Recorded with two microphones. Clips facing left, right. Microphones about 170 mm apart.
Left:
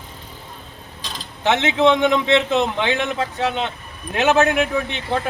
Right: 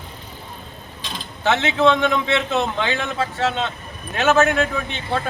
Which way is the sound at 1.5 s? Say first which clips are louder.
Left 1 dB; 20° left (ahead or behind).